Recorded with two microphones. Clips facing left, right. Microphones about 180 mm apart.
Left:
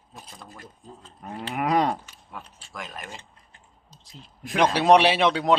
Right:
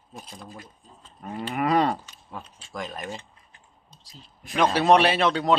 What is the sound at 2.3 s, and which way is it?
Speech, 30° right (ahead or behind).